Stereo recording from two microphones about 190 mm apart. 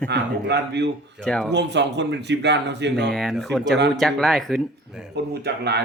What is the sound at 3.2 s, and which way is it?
Speech, centre (ahead or behind).